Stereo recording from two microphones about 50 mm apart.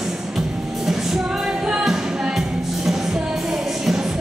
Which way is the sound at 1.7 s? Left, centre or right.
Centre.